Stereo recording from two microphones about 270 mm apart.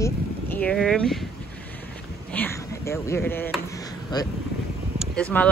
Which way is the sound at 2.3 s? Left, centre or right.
Centre.